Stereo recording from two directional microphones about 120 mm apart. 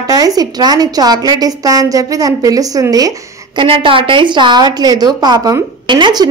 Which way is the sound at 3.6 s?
50° right (ahead or behind).